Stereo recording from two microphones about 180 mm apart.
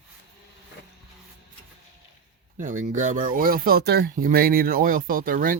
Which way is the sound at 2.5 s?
45° right (ahead or behind).